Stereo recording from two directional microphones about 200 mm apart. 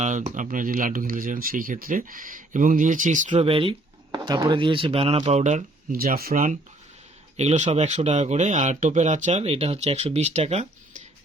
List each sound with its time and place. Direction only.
0.0 s speech: 35° right (ahead or behind)